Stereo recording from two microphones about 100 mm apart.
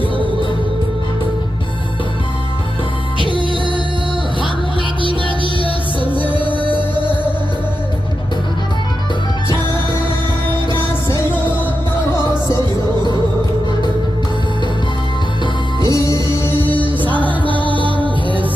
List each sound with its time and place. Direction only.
3.2 s music: 55° right (ahead or behind)
6.3 s music: 15° left (ahead or behind)
6.7 s music: 50° right (ahead or behind)
15.8 s music: 35° left (ahead or behind)
16.5 s music: 20° left (ahead or behind)
17.2 s music: 55° right (ahead or behind)